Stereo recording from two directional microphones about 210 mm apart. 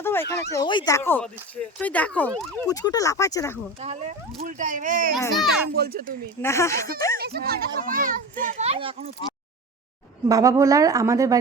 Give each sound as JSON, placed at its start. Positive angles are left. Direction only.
{"t": 0.0, "sound": "a sound", "side_deg": 10}
{"t": 0.5, "sound": "speech", "side_deg": 20}
{"t": 2.6, "sound": "speech", "side_deg": 15}
{"t": 3.8, "sound": "a child's voice", "side_deg": -30}
{"t": 5.4, "sound": "speech", "side_deg": 0}
{"t": 5.7, "sound": "speech", "side_deg": -45}
{"t": 6.4, "sound": "speech", "side_deg": 15}
{"t": 7.2, "sound": "a child's voice", "side_deg": -50}
{"t": 10.2, "sound": "speech", "side_deg": -15}